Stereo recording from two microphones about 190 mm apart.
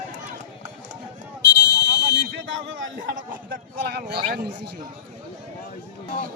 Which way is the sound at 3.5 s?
60° right (ahead or behind).